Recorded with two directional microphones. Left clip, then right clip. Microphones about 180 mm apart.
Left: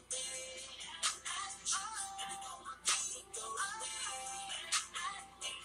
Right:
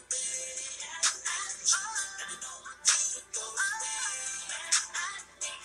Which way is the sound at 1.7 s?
35° right (ahead or behind).